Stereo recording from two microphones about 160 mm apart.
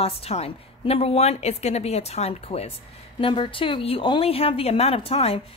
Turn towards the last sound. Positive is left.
turn(degrees=35)  # may be behind; listen again after turning